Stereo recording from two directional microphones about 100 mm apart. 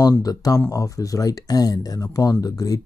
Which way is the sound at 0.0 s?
40° left (ahead or behind).